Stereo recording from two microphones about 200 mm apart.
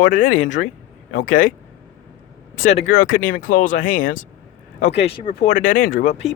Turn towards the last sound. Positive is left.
turn(degrees=35)  # may be behind; listen again after turning